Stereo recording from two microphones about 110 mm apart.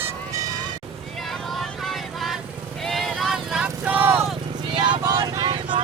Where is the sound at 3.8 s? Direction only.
15° right (ahead or behind).